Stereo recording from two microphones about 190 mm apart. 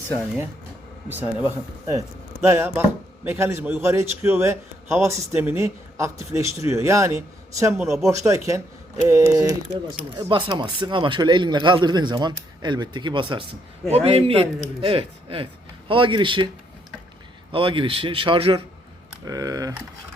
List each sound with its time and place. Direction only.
1.0 s a man's voice: 10° right (ahead or behind)
2.5 s a man's voice: 10° right (ahead or behind)
17.5 s speech: 25° right (ahead or behind)